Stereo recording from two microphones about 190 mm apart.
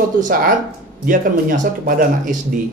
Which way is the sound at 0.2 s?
45° right (ahead or behind).